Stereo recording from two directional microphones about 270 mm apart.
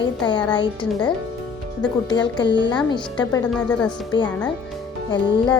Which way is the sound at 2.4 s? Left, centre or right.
Left.